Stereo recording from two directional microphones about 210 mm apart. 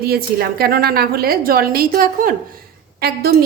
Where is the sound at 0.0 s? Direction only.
45° right (ahead or behind).